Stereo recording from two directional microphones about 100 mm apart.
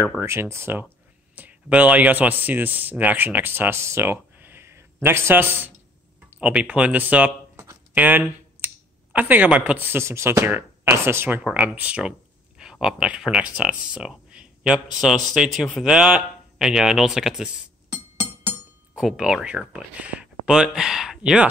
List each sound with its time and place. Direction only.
0.2 s speech: 25° right (ahead or behind); by 17.5 s 5° right (ahead or behind)
18.9 s speech: 5° right (ahead or behind)